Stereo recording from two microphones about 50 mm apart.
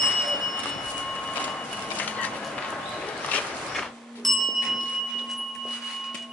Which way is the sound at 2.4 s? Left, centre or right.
Centre.